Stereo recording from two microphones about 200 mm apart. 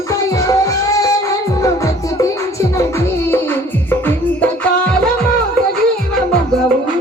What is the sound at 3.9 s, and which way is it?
Music, 10° left (ahead or behind).